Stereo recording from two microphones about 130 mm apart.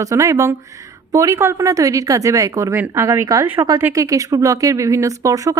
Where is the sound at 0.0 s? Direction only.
25° right (ahead or behind).